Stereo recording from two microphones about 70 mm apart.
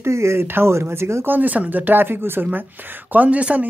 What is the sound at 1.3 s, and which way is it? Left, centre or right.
Speech, right.